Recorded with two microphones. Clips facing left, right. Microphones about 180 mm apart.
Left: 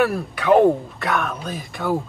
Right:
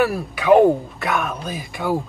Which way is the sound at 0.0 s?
5° right (ahead or behind).